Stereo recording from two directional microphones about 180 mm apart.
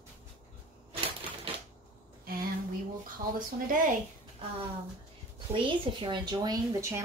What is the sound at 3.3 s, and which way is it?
Speech, 50° right (ahead or behind).